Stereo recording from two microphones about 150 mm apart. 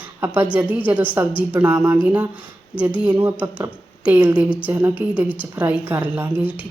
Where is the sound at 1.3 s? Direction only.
35° left (ahead or behind).